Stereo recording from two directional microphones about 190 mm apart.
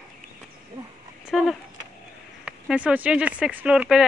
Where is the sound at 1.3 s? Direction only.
Centre (ahead or behind).